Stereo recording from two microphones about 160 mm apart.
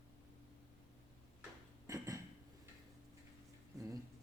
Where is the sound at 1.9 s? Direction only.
20° right (ahead or behind).